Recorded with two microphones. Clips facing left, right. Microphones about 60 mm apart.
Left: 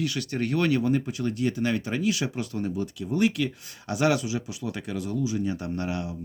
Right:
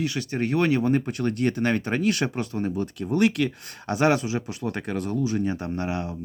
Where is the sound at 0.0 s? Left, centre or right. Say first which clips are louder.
Right 2 dB; right.